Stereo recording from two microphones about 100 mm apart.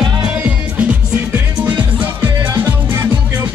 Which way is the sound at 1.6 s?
15° right (ahead or behind).